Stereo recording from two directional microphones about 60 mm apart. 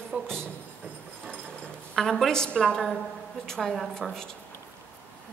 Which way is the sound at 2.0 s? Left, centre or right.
Centre.